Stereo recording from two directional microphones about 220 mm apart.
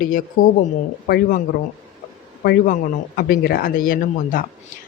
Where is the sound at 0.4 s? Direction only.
40° left (ahead or behind).